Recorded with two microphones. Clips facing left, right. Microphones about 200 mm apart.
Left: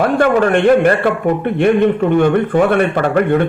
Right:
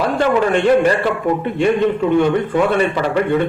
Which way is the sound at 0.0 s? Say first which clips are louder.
Left 3 dB; 55° left (ahead or behind).